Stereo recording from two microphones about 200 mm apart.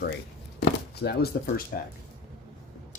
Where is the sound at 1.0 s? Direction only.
55° left (ahead or behind).